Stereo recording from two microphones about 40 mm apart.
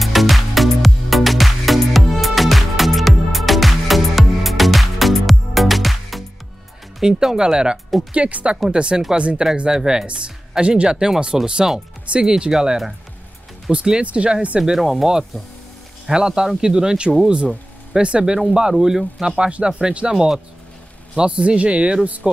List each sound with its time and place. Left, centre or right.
0.0 s music: centre
7.0 s speech: centre
8.1 s speech: right
8.7 s speech: right
9.7 s speech: centre
14.0 s speech: right
14.6 s speech: centre
16.1 s speech: centre
18.2 s speech: centre
19.2 s speech: right